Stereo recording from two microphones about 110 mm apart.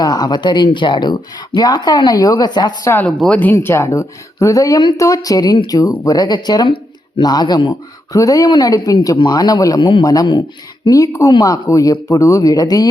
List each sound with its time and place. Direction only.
0.0 s speech: 40° left (ahead or behind)
2.8 s speech: 20° left (ahead or behind)
3.1 s speech: 5° left (ahead or behind)
3.5 s speech: 25° left (ahead or behind); by 7.8 s 45° left (ahead or behind)
8.1 s speech: 30° left (ahead or behind)